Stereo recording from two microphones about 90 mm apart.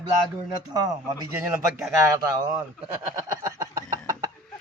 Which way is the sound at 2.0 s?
35° right (ahead or behind).